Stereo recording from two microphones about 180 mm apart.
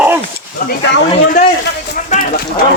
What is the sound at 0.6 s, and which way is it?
Speech, 50° left (ahead or behind).